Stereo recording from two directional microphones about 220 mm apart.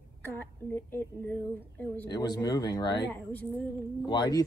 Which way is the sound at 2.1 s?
20° left (ahead or behind).